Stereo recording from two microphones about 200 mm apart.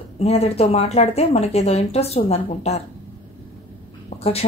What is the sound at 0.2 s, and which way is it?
A woman's voice, 30° left (ahead or behind).